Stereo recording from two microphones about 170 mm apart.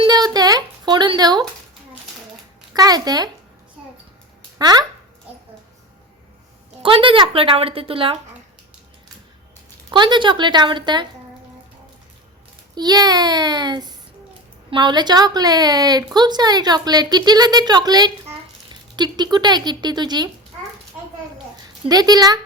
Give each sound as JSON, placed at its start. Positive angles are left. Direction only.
{"t": 0.0, "sound": "a sound", "side_deg": -25}
{"t": 2.7, "sound": "a woman's voice", "side_deg": -20}
{"t": 4.5, "sound": "speech", "side_deg": -25}
{"t": 6.8, "sound": "a woman's voice", "side_deg": -30}
{"t": 9.9, "sound": "a woman's voice", "side_deg": -30}
{"t": 12.7, "sound": "a woman's voice", "side_deg": -25}
{"t": 21.8, "sound": "a woman's voice", "side_deg": -20}